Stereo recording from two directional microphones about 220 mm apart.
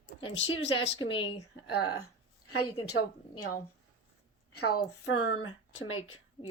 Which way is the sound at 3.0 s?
90° left.